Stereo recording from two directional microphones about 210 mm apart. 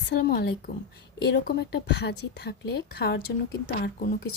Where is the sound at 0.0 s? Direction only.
50° left (ahead or behind).